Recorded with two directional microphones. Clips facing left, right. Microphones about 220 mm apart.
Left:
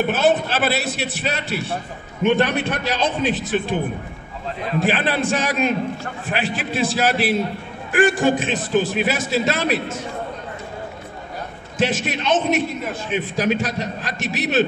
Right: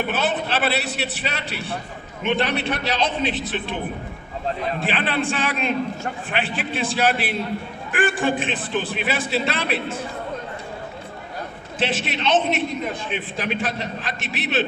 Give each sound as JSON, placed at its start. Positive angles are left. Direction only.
{"t": 0.1, "sound": "a man's voice", "side_deg": 45}
{"t": 4.7, "sound": "a man's voice", "side_deg": 45}
{"t": 11.8, "sound": "a man's voice", "side_deg": 50}